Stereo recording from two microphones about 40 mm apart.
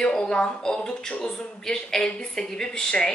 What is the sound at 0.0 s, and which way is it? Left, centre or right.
Speech, left.